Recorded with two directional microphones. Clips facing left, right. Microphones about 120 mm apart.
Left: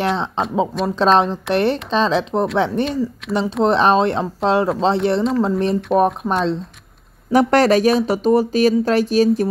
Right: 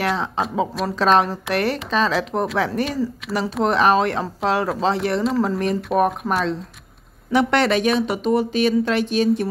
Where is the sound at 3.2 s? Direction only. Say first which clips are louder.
Left 4 dB; centre (ahead or behind).